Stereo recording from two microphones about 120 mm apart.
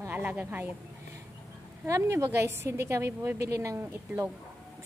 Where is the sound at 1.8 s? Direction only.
25° right (ahead or behind).